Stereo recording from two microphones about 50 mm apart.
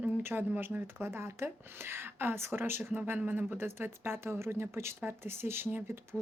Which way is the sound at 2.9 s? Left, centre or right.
Right.